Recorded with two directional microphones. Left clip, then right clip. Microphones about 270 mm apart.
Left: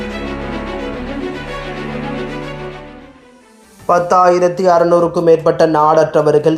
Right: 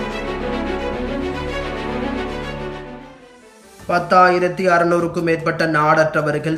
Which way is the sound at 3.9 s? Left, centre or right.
Centre.